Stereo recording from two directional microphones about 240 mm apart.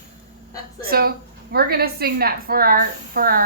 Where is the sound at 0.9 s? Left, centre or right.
Right.